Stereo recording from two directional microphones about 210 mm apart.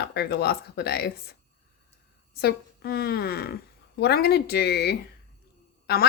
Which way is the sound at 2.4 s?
50° left (ahead or behind).